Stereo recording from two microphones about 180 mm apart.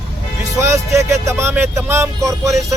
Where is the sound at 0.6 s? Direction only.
15° right (ahead or behind).